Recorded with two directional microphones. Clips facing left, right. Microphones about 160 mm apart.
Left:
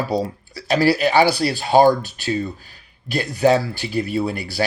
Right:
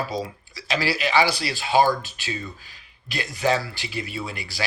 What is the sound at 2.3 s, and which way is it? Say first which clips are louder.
Speech: left 10 dB; 35° left (ahead or behind).